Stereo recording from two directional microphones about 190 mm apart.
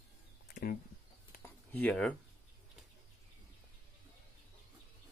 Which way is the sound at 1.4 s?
10° left (ahead or behind).